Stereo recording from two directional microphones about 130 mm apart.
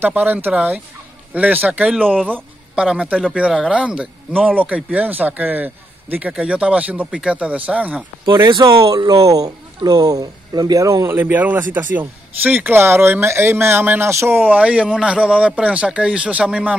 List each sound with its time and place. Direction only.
0.0 s speech: 15° right (ahead or behind)
8.5 s speech: 35° right (ahead or behind); by 16.7 s 10° right (ahead or behind)